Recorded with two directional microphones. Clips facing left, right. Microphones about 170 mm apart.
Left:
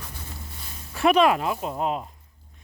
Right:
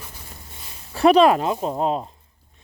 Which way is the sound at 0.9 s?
35° right (ahead or behind).